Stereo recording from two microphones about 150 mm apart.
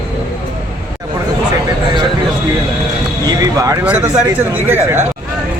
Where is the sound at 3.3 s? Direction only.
25° right (ahead or behind).